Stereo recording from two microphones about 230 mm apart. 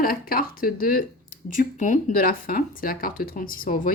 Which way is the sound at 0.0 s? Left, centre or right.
Left.